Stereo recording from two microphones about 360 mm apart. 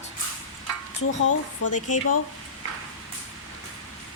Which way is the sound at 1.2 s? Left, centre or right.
Left.